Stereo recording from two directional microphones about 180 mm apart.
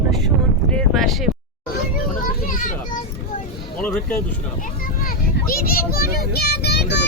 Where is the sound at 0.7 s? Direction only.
5° left (ahead or behind).